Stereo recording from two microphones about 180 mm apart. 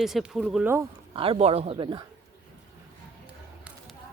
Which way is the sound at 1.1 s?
30° right (ahead or behind).